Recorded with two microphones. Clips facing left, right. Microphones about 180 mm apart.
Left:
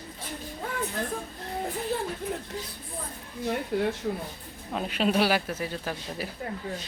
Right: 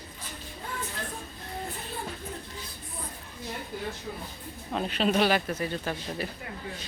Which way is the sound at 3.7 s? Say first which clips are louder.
Left 11 dB; 70° left (ahead or behind).